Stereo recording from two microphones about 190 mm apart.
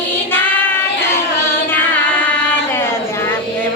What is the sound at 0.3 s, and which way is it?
Child singing, 10° left (ahead or behind).